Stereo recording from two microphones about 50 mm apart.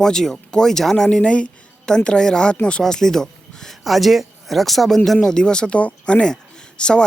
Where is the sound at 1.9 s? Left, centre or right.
Centre.